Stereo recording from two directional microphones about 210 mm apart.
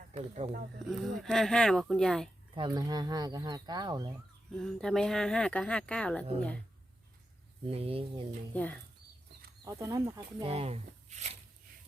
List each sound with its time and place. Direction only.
0.3 s speech: 30° right (ahead or behind)
0.9 s speech: centre (ahead or behind)
2.6 s speech: 20° right (ahead or behind)
4.5 s speech: centre (ahead or behind)
7.6 s speech: 25° right (ahead or behind)
9.6 s speech: 15° right (ahead or behind)